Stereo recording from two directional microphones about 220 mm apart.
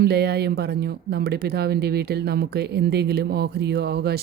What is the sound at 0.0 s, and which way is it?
Speech, 45° right (ahead or behind).